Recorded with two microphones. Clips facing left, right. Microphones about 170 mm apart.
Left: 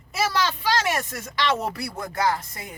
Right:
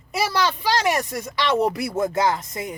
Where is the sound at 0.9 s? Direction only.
15° right (ahead or behind).